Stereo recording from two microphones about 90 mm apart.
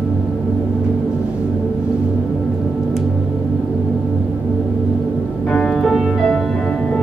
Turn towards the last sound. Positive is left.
turn(degrees=0)  # may be behind; listen again after turning